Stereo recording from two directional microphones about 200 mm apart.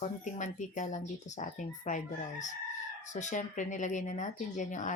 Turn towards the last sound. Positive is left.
turn(degrees=40)  # may be behind; listen again after turning